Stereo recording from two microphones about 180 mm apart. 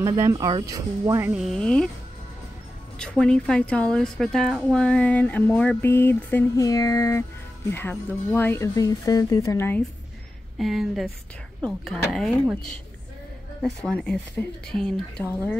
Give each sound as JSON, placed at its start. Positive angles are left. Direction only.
{"t": 0.0, "sound": "speech", "side_deg": -15}
{"t": 1.3, "sound": "speech", "side_deg": 0}
{"t": 3.0, "sound": "a woman's voice", "side_deg": 5}
{"t": 10.6, "sound": "speech", "side_deg": 0}
{"t": 13.6, "sound": "speech", "side_deg": 5}